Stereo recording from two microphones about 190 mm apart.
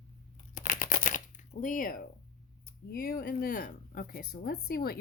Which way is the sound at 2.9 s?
55° left (ahead or behind).